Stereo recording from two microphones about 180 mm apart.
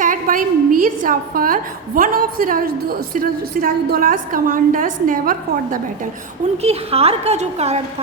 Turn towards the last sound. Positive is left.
turn(degrees=-40)  # may be behind; listen again after turning